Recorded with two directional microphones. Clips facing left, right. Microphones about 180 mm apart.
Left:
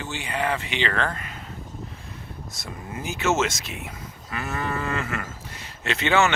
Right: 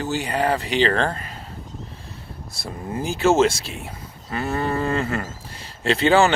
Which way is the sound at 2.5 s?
30° right (ahead or behind).